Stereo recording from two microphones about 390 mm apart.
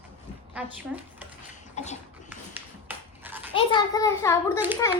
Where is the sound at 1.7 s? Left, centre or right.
Centre.